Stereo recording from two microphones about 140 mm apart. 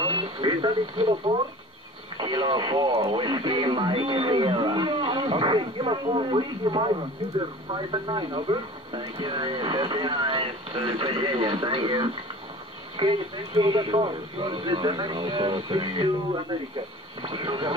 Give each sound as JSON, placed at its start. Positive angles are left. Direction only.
{"t": 0.0, "sound": "speech", "side_deg": -35}